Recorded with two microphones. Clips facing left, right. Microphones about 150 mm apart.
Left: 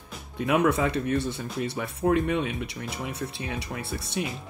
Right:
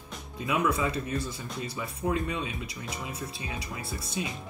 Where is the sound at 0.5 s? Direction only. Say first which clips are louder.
Left 5 dB; 65° left (ahead or behind).